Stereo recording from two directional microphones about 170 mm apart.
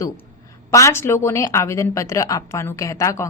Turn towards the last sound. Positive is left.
turn(degrees=20)  # may be behind; listen again after turning